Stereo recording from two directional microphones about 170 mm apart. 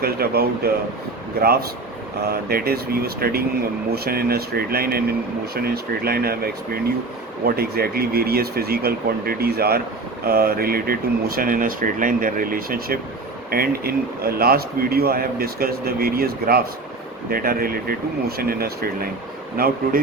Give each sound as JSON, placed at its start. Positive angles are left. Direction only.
{"t": 0.0, "sound": "a man's voice", "side_deg": -65}
{"t": 2.5, "sound": "a man's voice", "side_deg": -65}